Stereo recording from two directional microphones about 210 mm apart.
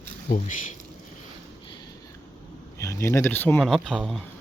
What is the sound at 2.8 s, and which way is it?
Speech, 15° left (ahead or behind).